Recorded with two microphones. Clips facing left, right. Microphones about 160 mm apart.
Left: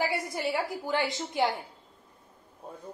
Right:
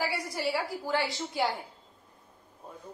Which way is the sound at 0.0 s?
20° left (ahead or behind).